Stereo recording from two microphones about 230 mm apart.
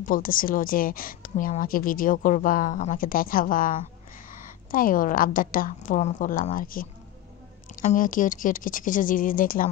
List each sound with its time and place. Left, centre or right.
0.0 s a woman's voice: left